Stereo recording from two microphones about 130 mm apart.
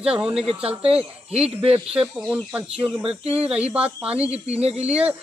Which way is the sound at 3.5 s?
10° right (ahead or behind).